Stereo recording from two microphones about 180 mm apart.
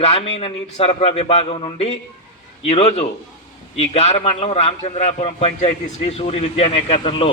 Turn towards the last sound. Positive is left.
turn(degrees=30)  # may be behind; listen again after turning